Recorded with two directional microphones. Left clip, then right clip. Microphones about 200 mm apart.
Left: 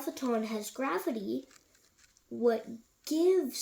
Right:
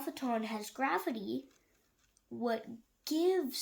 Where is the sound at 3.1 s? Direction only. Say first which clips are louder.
Left 4 dB; 20° right (ahead or behind).